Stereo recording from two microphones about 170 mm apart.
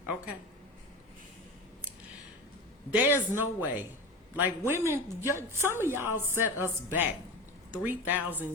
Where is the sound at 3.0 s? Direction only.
10° right (ahead or behind).